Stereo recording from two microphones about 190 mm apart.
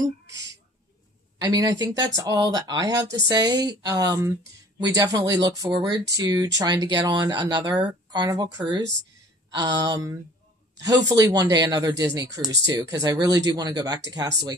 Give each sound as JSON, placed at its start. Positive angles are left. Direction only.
{"t": 1.4, "sound": "speech", "side_deg": -20}